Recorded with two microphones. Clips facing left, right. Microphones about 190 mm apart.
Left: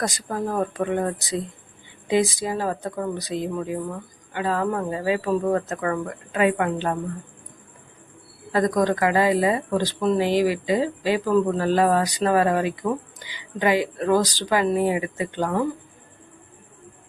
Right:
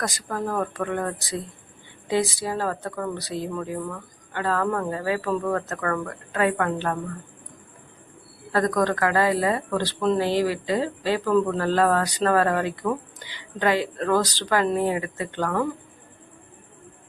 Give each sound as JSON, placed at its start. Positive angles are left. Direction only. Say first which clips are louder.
{"t": 0.0, "sound": "speech", "louder": "left 2 dB", "side_deg": 15}
{"t": 8.5, "sound": "speech", "louder": "left 2 dB", "side_deg": 15}